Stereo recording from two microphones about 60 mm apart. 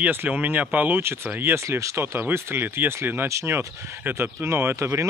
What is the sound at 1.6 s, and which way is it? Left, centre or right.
Speech, right.